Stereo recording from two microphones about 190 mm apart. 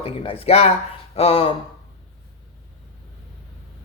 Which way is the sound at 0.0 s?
30° left (ahead or behind).